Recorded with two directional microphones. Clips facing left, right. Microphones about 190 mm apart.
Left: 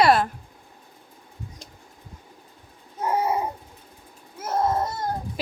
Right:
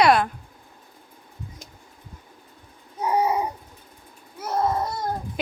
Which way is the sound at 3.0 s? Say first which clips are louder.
Right 2 dB; centre (ahead or behind).